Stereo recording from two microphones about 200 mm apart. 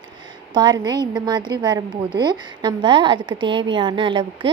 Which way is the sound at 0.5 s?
20° right (ahead or behind).